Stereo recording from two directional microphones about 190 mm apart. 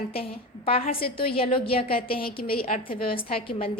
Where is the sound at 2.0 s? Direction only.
50° left (ahead or behind).